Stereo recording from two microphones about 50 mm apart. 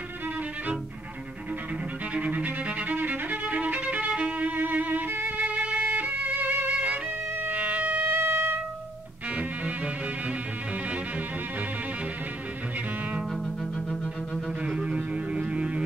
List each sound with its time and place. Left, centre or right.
2.1 s music: right
5.4 s violin: right
6.7 s music: right
14.7 s music: centre